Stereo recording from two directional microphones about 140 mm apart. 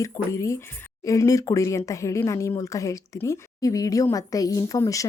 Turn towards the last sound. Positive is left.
turn(degrees=25)  # may be behind; listen again after turning